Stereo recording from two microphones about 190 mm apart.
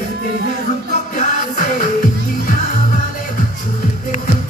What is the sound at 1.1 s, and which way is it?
Music, 40° left (ahead or behind).